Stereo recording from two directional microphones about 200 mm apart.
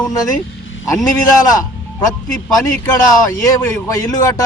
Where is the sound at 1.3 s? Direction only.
15° left (ahead or behind).